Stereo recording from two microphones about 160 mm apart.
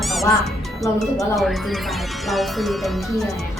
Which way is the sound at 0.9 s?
Centre (ahead or behind).